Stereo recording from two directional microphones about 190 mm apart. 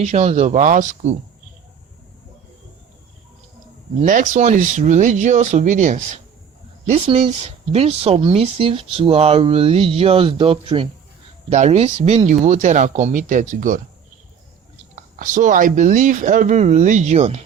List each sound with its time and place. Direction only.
0.0 s speech: 35° right (ahead or behind)
4.0 s speech: 45° right (ahead or behind)
15.1 s speech: 45° right (ahead or behind)